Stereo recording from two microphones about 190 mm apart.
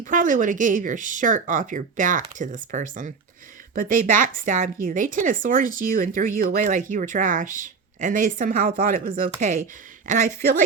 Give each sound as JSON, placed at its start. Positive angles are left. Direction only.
{"t": 0.0, "sound": "speech", "side_deg": -45}